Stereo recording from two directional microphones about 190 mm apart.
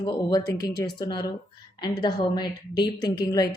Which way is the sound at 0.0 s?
20° left (ahead or behind).